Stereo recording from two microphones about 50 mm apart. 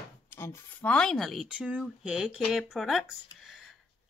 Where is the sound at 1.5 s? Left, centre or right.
Right.